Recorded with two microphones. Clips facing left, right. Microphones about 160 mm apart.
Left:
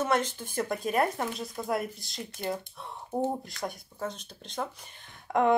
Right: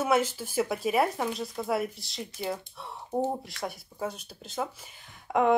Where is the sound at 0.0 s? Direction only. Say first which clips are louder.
Right 2 dB; 5° right (ahead or behind).